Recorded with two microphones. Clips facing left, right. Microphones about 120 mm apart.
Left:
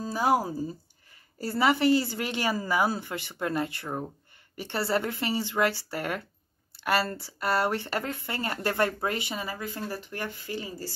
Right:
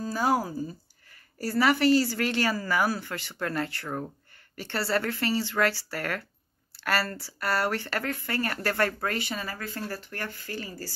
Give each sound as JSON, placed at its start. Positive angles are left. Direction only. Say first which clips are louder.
{"t": 0.0, "sound": "a woman's voice", "louder": "left 1 dB", "side_deg": 20}